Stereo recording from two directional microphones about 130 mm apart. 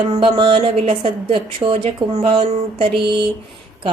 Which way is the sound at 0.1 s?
45° right (ahead or behind).